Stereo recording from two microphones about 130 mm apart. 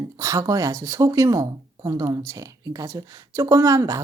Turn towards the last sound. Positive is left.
turn(degrees=-25)  # may be behind; listen again after turning